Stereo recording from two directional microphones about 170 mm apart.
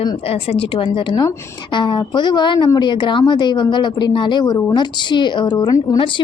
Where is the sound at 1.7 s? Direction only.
30° left (ahead or behind).